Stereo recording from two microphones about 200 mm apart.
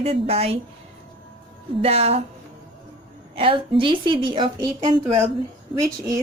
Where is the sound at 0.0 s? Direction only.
30° right (ahead or behind).